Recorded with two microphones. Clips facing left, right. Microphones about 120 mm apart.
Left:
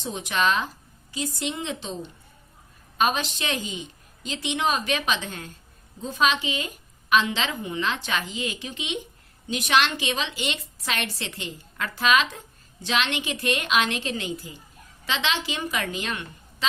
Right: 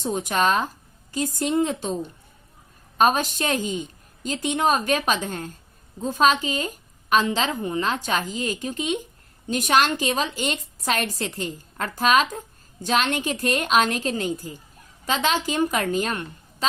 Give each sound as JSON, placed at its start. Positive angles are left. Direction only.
{"t": 0.0, "sound": "a woman's voice", "side_deg": -45}